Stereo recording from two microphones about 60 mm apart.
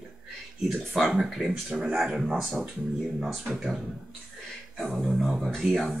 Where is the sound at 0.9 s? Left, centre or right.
Centre.